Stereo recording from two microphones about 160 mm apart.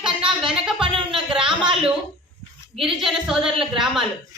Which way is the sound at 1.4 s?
5° right (ahead or behind).